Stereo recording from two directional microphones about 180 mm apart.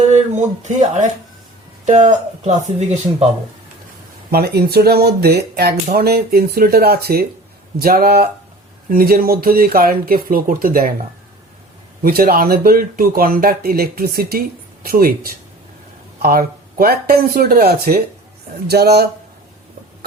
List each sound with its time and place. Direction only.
0.1 s speech: 40° right (ahead or behind)
4.3 s speech: 60° right (ahead or behind)
12.0 s speech: 60° right (ahead or behind)